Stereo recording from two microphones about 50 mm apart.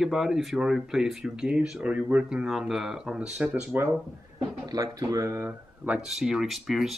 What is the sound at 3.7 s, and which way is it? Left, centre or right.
Speech, right.